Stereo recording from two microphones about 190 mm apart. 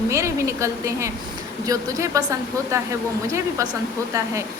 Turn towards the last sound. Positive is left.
turn(degrees=-15)  # may be behind; listen again after turning